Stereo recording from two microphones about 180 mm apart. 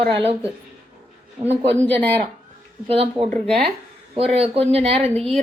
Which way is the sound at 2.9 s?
35° right (ahead or behind).